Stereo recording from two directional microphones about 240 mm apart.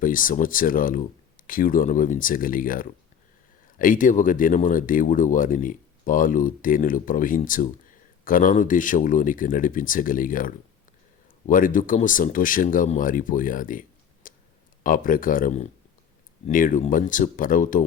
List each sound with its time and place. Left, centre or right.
0.0 s speech: left
14.2 s clicking: left
14.8 s speech: left